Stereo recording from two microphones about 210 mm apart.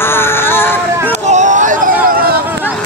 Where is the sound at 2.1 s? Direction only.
45° right (ahead or behind).